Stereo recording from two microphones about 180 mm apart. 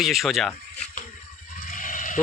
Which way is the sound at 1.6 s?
50° left (ahead or behind).